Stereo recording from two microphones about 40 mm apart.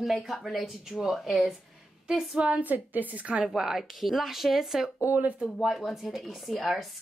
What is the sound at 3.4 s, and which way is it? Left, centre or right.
A woman's voice, centre.